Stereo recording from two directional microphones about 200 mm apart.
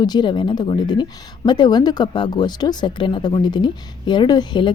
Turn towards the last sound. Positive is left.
turn(degrees=20)  # may be behind; listen again after turning